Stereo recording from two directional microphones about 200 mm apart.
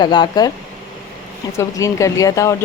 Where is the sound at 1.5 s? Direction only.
15° left (ahead or behind).